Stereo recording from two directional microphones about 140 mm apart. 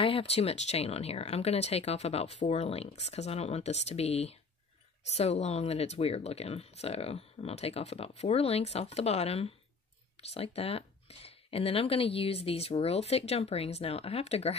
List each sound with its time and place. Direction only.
0.0 s speech: 40° left (ahead or behind)